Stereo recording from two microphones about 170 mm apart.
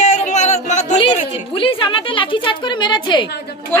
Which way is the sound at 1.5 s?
30° left (ahead or behind).